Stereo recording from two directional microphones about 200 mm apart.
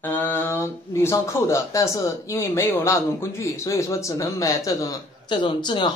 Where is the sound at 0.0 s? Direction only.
10° left (ahead or behind).